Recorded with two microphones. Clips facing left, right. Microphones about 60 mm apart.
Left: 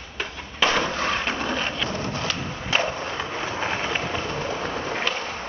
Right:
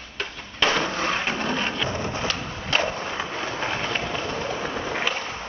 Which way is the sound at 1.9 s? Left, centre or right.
Centre.